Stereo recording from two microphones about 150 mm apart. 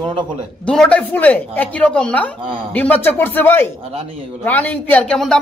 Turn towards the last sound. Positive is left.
turn(degrees=5)  # may be behind; listen again after turning